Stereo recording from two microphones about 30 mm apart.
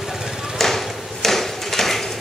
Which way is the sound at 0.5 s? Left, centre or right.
Centre.